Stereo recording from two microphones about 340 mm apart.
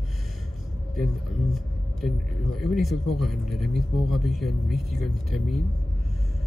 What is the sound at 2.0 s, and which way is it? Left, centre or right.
Speech, centre.